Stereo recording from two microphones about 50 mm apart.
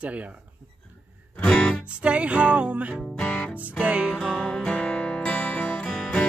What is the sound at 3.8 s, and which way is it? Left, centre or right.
Music, centre.